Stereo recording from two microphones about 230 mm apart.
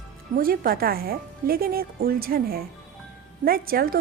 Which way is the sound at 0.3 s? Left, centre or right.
Right.